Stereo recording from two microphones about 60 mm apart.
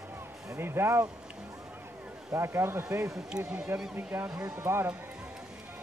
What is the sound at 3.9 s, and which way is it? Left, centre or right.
Speech, right.